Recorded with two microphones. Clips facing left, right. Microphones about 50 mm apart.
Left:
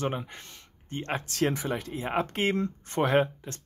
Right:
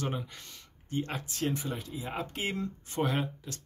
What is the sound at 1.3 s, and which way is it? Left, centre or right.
Speech, left.